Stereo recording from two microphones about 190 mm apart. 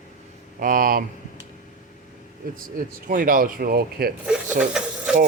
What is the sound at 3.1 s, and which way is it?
Speech, 45° right (ahead or behind).